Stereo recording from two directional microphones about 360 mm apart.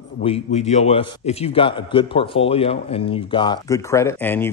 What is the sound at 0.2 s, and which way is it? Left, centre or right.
A man's voice, centre.